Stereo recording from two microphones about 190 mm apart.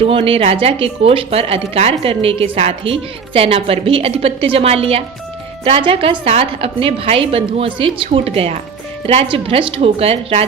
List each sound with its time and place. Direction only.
0.0 s speech: 30° right (ahead or behind)